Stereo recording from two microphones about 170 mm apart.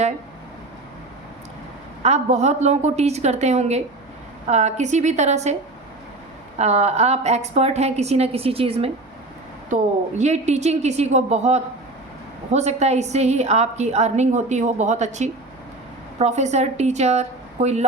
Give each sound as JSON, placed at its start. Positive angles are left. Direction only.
{"t": 2.0, "sound": "a woman's voice", "side_deg": -40}
{"t": 6.6, "sound": "a woman's voice", "side_deg": -40}